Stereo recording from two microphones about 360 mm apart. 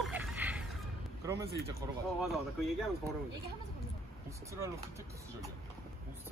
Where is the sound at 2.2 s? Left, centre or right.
Centre.